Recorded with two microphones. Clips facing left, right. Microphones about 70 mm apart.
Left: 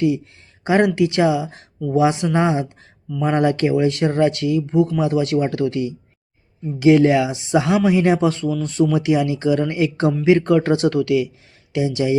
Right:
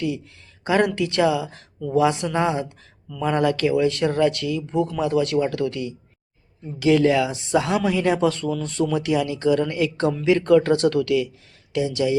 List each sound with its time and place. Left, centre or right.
0.6 s speech: left
4.7 s speech: centre
8.4 s speech: centre; by 12.1 s left